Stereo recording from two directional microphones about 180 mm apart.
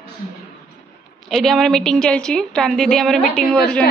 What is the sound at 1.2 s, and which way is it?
A woman's voice, centre (ahead or behind).